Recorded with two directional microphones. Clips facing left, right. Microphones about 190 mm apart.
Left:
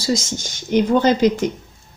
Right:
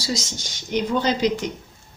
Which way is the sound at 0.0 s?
50° left (ahead or behind).